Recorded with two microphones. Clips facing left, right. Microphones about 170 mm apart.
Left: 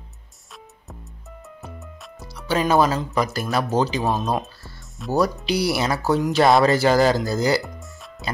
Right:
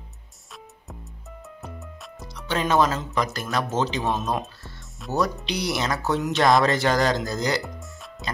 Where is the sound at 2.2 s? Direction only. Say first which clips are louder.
Left 4 dB; 5° left (ahead or behind).